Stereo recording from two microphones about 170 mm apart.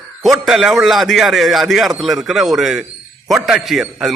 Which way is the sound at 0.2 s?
Centre (ahead or behind).